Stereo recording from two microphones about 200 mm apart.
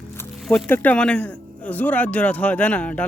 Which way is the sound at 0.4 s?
10° left (ahead or behind).